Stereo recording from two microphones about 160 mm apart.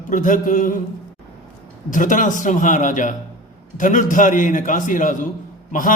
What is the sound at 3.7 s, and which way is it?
Music, 55° left (ahead or behind).